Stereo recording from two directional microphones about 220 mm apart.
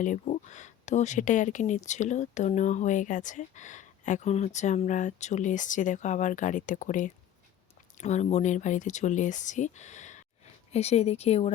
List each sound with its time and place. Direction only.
0.0 s speech: 35° left (ahead or behind)